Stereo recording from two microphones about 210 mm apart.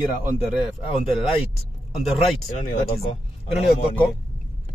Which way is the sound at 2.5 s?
30° left (ahead or behind).